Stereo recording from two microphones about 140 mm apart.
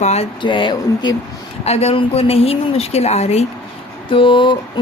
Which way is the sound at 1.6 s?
45° left (ahead or behind).